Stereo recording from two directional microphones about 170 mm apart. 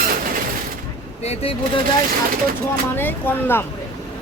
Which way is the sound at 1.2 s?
35° left (ahead or behind).